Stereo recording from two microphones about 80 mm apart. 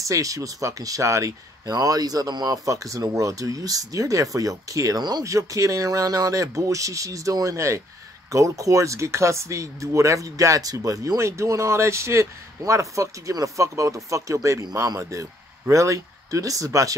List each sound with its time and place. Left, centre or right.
0.1 s speech: right
1.7 s speech: right